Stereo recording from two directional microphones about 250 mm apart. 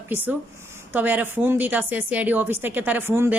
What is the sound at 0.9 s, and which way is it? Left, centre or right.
A woman's voice, centre.